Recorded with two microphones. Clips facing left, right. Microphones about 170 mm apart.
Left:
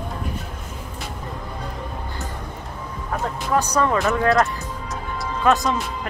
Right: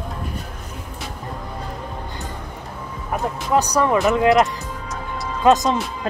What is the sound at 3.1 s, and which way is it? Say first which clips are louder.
Speech: right 2 dB; 15° right (ahead or behind).